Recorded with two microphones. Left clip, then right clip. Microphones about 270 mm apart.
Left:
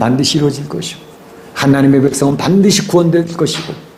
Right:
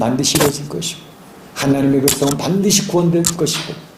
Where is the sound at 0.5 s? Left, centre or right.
Left.